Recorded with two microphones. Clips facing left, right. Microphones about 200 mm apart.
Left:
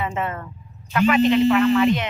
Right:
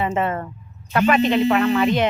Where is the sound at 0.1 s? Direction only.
30° right (ahead or behind).